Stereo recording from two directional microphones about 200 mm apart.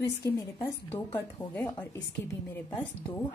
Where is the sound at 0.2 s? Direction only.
15° left (ahead or behind).